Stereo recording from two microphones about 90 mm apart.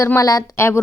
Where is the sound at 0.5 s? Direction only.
25° left (ahead or behind).